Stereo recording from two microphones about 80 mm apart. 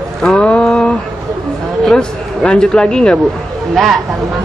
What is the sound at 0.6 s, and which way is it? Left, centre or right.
A man's voice, centre.